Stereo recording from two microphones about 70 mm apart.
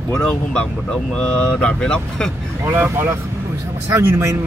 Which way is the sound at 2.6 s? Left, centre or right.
Right.